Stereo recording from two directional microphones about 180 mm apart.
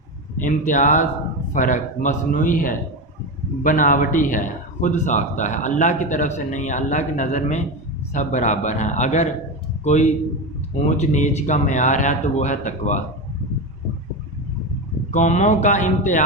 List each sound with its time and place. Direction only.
0.4 s a man's voice: 45° left (ahead or behind)
15.1 s a man's voice: 40° left (ahead or behind)